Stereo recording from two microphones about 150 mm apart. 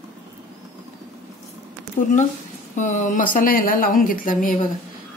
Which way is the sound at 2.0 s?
55° left (ahead or behind).